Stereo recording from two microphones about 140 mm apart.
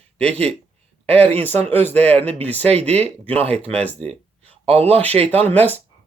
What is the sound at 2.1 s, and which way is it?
Speech, 45° right (ahead or behind).